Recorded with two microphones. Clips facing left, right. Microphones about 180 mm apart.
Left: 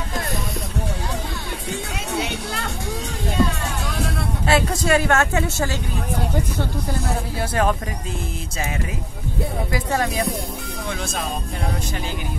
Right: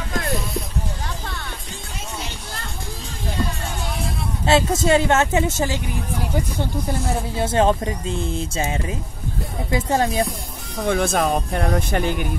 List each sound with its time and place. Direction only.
2.1 s music: 70° left (ahead or behind)
4.5 s a woman's voice: 25° right (ahead or behind)
7.3 s a woman's voice: 25° right (ahead or behind)
9.7 s a woman's voice: 25° right (ahead or behind)
10.8 s speech: 55° right (ahead or behind)